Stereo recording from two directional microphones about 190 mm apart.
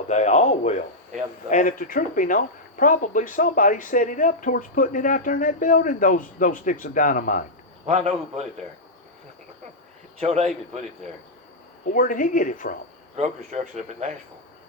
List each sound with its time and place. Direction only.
0.1 s speech: 40° left (ahead or behind)
7.9 s a man's voice: 35° right (ahead or behind)
10.2 s a man's voice: 35° right (ahead or behind)
11.9 s speech: 45° left (ahead or behind)
13.1 s a man's voice: 35° right (ahead or behind)